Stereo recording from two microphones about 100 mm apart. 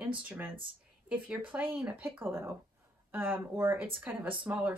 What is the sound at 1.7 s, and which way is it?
Speech, 15° right (ahead or behind).